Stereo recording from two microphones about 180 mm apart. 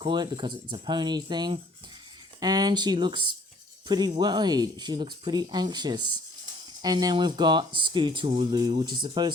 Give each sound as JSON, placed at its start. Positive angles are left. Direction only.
{"t": 0.0, "sound": "speech", "side_deg": -25}